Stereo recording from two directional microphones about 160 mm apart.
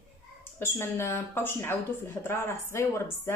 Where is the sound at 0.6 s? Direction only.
15° left (ahead or behind).